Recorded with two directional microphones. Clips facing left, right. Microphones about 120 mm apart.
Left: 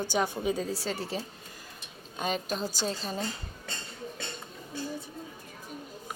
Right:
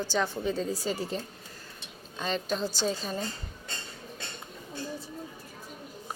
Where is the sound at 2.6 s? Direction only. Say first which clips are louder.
Right 2 dB; 45° left (ahead or behind).